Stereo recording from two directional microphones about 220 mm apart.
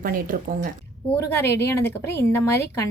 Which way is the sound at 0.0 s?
40° right (ahead or behind).